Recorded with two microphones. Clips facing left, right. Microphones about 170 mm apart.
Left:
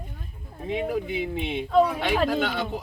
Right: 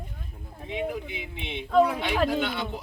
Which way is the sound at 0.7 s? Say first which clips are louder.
Left 4 dB; 45° left (ahead or behind).